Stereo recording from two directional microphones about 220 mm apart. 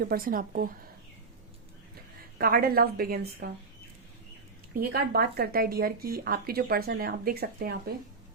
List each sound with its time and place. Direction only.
0.0 s speech: 40° right (ahead or behind)
2.4 s speech: 45° right (ahead or behind)
4.7 s speech: 45° right (ahead or behind)